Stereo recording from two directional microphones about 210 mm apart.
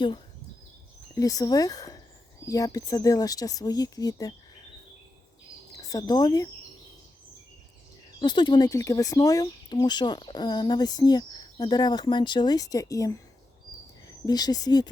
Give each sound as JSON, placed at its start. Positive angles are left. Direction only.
{"t": 1.1, "sound": "speech", "side_deg": 15}
{"t": 5.7, "sound": "speech", "side_deg": 15}
{"t": 8.2, "sound": "speech", "side_deg": 20}
{"t": 14.3, "sound": "speech", "side_deg": 20}